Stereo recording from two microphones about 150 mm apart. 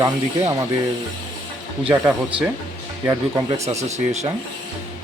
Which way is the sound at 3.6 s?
50° right (ahead or behind).